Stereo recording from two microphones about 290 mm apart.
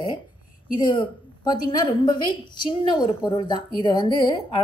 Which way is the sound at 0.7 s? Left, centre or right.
Centre.